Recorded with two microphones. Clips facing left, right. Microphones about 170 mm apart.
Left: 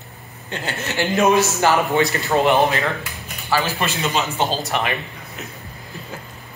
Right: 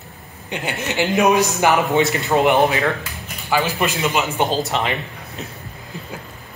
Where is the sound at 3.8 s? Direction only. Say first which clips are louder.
Right 2 dB; 15° right (ahead or behind).